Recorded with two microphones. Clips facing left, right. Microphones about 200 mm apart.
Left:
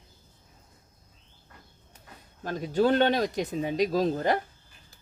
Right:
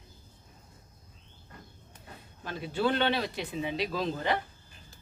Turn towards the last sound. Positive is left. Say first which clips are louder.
# left 5 dB
turn(degrees=45)  # may be behind; listen again after turning